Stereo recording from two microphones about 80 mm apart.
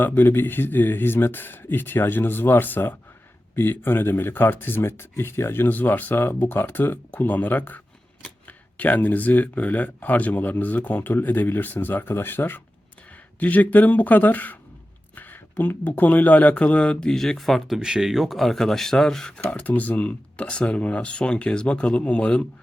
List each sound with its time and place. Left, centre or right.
0.0 s speech: left